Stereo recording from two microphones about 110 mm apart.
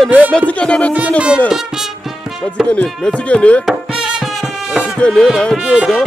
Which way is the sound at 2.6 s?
10° left (ahead or behind).